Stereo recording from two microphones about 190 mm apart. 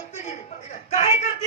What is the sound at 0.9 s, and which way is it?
Speech, 35° left (ahead or behind).